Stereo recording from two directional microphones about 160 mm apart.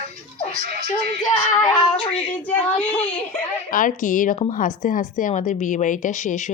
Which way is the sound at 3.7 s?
55° left (ahead or behind).